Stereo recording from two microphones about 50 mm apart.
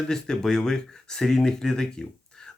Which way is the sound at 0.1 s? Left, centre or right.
Centre.